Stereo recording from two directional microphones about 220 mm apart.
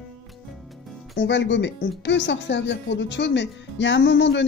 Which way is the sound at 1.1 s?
55° left (ahead or behind).